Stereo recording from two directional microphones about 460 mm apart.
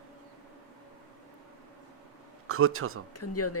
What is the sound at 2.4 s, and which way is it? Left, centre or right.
Speech, right.